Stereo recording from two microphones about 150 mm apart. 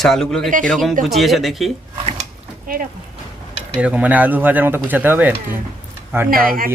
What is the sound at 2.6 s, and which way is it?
Speech, 75° right (ahead or behind).